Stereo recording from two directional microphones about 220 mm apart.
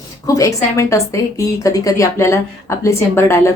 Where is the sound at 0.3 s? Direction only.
15° left (ahead or behind).